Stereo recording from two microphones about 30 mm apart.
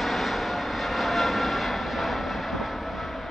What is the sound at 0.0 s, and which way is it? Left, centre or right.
Vehicle, centre.